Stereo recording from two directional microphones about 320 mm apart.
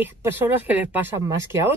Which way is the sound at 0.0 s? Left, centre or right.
Centre.